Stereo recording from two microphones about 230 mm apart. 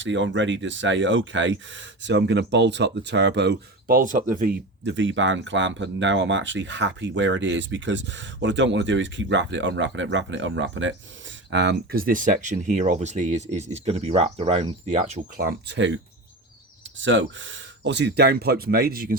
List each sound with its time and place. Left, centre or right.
0.0 s speech: right
4.9 s speech: right
17.0 s speech: right